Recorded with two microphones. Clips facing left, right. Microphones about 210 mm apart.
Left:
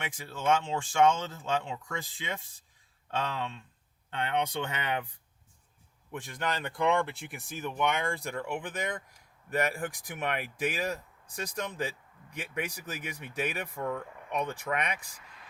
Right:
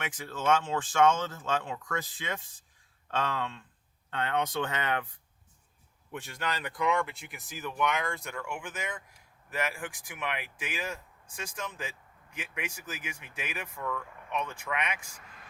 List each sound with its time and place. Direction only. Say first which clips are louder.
0.0 s speech: right 1 dB; 15° left (ahead or behind)
6.2 s speech: left 2 dB; 20° left (ahead or behind); by 15.2 s 35° left (ahead or behind)